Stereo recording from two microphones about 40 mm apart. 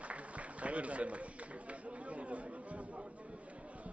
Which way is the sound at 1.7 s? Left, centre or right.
Right.